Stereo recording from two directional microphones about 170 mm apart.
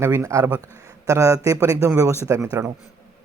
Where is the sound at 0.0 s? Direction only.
15° right (ahead or behind).